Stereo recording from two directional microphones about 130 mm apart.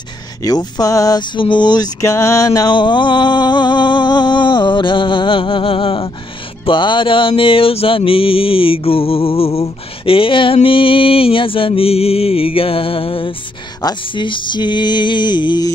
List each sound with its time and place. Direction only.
0.4 s male singing: 30° left (ahead or behind)
6.6 s music: 40° left (ahead or behind)
13.8 s male singing: 40° left (ahead or behind)